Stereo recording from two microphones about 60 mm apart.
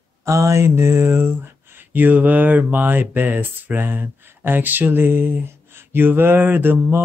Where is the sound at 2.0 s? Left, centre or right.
Right.